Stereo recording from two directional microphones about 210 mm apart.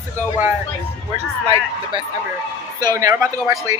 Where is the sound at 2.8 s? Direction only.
15° right (ahead or behind).